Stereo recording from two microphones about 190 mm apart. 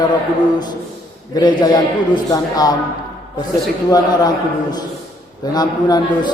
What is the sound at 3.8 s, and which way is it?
Speech, 20° left (ahead or behind).